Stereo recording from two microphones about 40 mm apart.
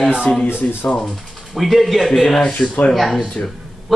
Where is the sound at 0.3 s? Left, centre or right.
Left.